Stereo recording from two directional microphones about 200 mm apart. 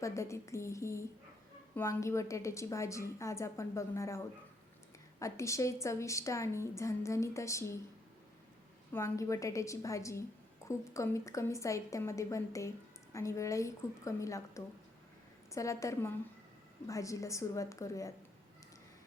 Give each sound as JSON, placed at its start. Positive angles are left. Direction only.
{"t": 0.0, "sound": "a woman's voice", "side_deg": 15}
{"t": 8.9, "sound": "a woman's voice", "side_deg": 10}